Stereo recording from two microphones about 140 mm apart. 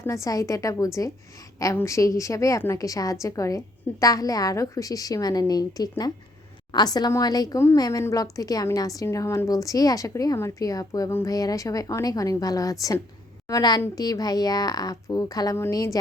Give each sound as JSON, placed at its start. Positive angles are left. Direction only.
{"t": 0.0, "sound": "a woman's voice", "side_deg": 20}